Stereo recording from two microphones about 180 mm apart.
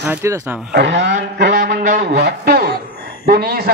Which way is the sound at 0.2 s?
15° right (ahead or behind).